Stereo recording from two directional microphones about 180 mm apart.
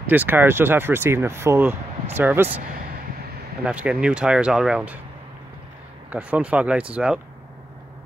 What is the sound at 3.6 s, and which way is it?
Speech, 5° right (ahead or behind).